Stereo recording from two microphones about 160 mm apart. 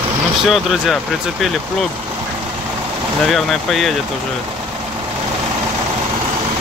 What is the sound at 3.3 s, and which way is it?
Speech, centre (ahead or behind).